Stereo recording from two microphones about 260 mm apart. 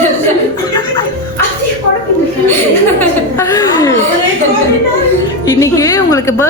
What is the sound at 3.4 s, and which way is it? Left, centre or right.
Speech, centre.